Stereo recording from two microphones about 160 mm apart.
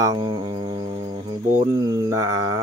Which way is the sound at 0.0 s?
25° right (ahead or behind).